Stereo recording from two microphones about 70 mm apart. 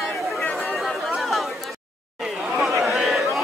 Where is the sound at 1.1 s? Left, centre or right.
Centre.